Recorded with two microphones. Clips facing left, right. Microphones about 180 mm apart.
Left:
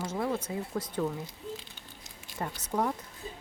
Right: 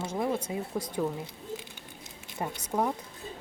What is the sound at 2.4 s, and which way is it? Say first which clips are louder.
Speech: right 1 dB; 10° right (ahead or behind).